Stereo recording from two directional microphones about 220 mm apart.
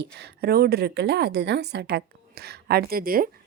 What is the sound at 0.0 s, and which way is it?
A woman's voice, 50° right (ahead or behind).